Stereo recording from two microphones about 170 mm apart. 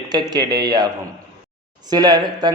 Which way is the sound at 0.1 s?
25° right (ahead or behind).